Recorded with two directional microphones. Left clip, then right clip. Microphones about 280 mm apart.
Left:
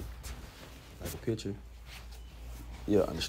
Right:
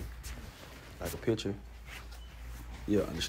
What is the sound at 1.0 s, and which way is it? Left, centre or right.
Speech, centre.